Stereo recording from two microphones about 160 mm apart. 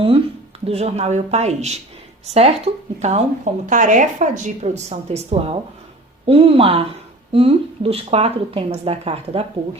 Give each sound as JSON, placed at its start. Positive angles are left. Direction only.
{"t": 0.6, "sound": "speech", "side_deg": -40}